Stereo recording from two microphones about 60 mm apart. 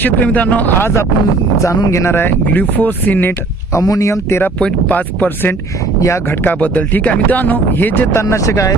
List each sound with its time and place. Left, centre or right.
0.0 s speech: left
0.8 s speech: left
1.6 s speech: left
1.9 s speech: left
2.1 s speech: left
3.7 s speech: left
4.6 s speech: left
6.0 s speech: left
6.4 s speech: left
8.1 s speech: left